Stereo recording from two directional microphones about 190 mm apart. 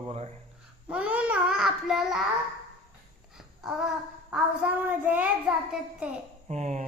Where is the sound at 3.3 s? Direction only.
Centre (ahead or behind).